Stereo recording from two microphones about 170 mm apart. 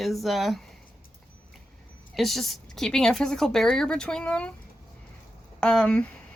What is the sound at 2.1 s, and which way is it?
A woman's voice, centre (ahead or behind).